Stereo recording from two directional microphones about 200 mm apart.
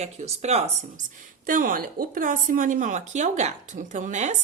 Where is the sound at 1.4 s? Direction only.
45° right (ahead or behind).